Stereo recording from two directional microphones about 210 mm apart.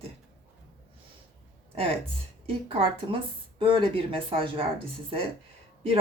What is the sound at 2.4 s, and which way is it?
Speech, 25° right (ahead or behind).